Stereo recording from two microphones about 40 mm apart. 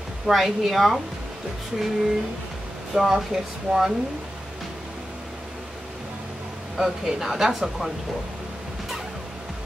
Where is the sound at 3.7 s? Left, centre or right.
Centre.